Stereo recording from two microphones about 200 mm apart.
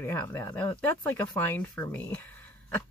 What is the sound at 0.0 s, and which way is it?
Speech, 10° left (ahead or behind).